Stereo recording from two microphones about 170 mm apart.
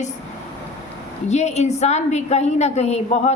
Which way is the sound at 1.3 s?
40° left (ahead or behind).